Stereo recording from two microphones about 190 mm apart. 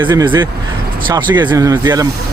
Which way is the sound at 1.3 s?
20° right (ahead or behind).